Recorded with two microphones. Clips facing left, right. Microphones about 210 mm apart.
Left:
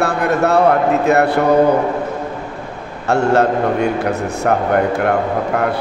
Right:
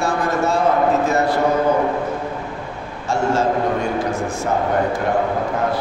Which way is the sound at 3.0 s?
65° left (ahead or behind).